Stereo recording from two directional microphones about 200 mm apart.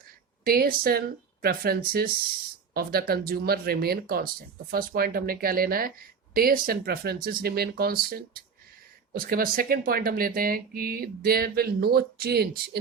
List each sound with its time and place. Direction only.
0.4 s speech: 50° right (ahead or behind)